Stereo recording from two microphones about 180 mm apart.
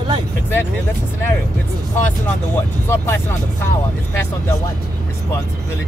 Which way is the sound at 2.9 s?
10° left (ahead or behind).